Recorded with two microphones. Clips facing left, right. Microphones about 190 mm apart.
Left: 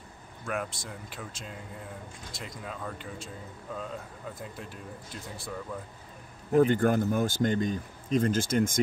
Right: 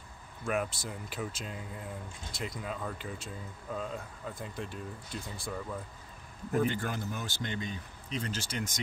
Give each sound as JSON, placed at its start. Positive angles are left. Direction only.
{"t": 0.5, "sound": "speech", "side_deg": -5}
{"t": 4.4, "sound": "speech", "side_deg": 0}
{"t": 6.5, "sound": "speech", "side_deg": 50}